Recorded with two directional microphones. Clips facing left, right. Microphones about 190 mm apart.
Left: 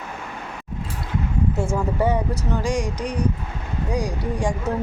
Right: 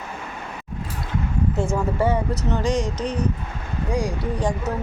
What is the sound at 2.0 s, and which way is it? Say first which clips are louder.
Speech: even; 15° left (ahead or behind).